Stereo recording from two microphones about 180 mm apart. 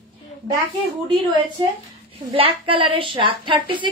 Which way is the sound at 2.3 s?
30° right (ahead or behind).